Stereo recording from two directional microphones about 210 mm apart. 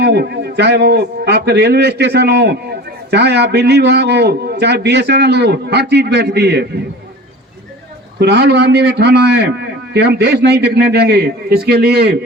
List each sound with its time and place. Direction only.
0.0 s a man's voice: 50° right (ahead or behind)
8.2 s a man's voice: 55° right (ahead or behind)